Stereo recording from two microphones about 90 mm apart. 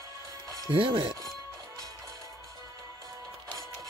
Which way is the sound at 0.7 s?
75° right (ahead or behind).